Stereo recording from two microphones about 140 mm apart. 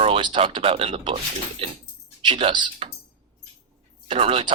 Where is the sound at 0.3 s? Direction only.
40° right (ahead or behind).